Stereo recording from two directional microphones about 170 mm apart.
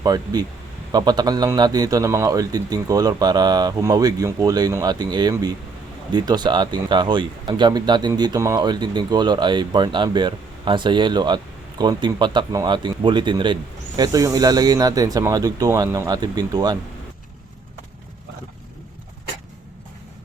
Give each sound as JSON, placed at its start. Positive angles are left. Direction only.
{"t": 0.0, "sound": "speech", "side_deg": -25}